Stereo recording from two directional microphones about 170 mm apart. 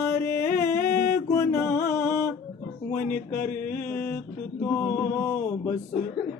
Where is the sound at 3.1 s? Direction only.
60° left (ahead or behind).